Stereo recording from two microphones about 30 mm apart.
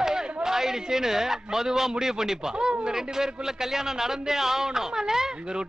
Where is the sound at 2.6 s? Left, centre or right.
Right.